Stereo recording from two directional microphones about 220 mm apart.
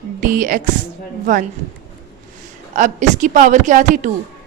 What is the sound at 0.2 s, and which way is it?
A woman's voice, 40° right (ahead or behind).